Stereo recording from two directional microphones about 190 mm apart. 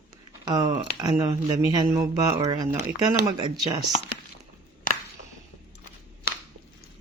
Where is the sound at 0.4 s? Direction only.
20° right (ahead or behind).